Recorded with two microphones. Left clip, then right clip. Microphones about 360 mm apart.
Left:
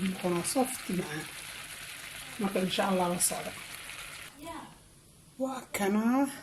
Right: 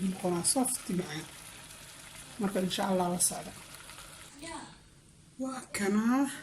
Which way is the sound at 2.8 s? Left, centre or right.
Centre.